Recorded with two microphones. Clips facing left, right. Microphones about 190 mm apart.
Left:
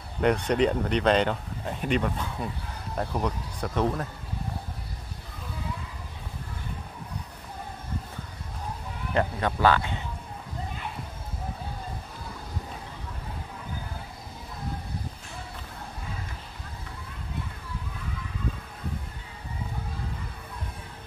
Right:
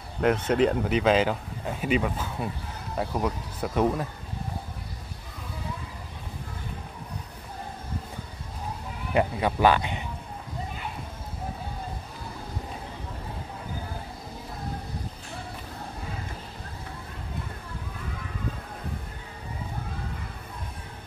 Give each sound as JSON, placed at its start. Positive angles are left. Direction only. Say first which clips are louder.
{"t": 0.2, "sound": "speech", "louder": "right 1 dB", "side_deg": -5}
{"t": 9.1, "sound": "speech", "louder": "right 2 dB", "side_deg": -10}